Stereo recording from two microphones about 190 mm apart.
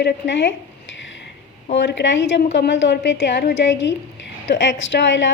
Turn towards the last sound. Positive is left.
turn(degrees=70)  # may be behind; listen again after turning